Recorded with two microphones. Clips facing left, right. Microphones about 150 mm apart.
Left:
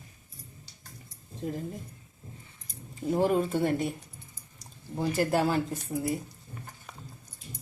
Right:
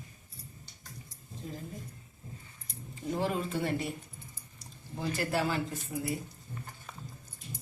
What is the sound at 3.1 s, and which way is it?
Speech, 45° left (ahead or behind).